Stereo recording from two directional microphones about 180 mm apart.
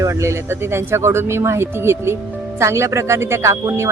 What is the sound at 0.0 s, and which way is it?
Speech, 15° right (ahead or behind).